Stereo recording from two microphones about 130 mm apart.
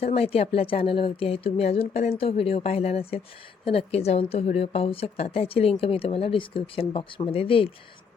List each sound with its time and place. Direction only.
0.0 s speech: 50° left (ahead or behind)